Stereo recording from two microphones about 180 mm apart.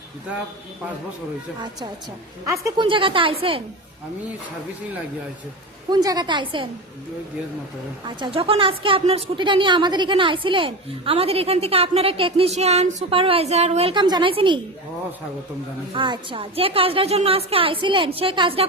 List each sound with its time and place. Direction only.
2.5 s a woman's voice: 15° right (ahead or behind)
2.8 s a woman's voice: 30° right (ahead or behind)
5.9 s a woman's voice: 20° right (ahead or behind)
8.0 s a woman's voice: 30° right (ahead or behind)
16.0 s a woman's voice: 30° right (ahead or behind)